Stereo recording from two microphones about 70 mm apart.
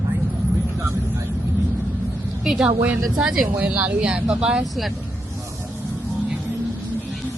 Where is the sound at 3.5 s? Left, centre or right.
Centre.